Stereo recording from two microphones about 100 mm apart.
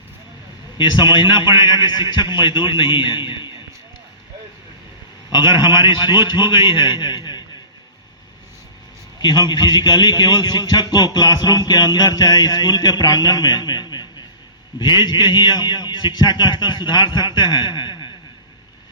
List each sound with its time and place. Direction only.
0.8 s a man's voice: 50° left (ahead or behind)
5.3 s a man's voice: 50° left (ahead or behind)
9.2 s a man's voice: 45° left (ahead or behind)